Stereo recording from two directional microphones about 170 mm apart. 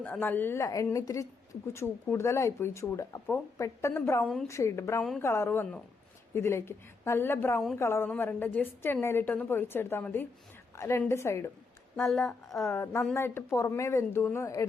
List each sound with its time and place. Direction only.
0.0 s a woman's voice: 10° left (ahead or behind)
11.9 s a woman's voice: centre (ahead or behind)
12.6 s a woman's voice: 15° left (ahead or behind)